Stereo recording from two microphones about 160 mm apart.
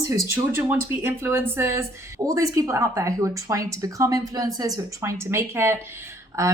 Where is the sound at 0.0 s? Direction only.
15° right (ahead or behind).